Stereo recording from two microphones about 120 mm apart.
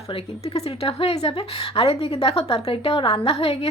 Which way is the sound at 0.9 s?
50° left (ahead or behind).